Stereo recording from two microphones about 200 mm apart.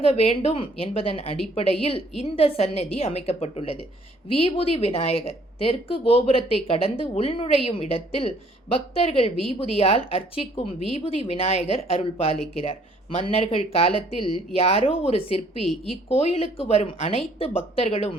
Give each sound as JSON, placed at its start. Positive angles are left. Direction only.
{"t": 0.0, "sound": "a woman's voice", "side_deg": 30}